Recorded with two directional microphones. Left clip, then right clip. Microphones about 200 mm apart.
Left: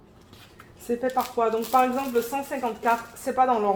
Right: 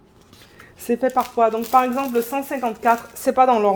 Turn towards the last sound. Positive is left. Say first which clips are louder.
# right 6 dB
turn(degrees=-70)  # may be behind; listen again after turning